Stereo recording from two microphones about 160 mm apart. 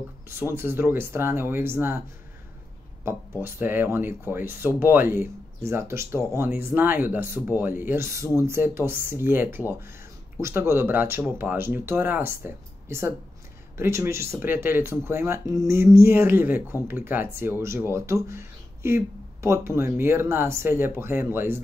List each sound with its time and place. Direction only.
0.4 s speech: 15° right (ahead or behind)
3.1 s speech: 15° right (ahead or behind)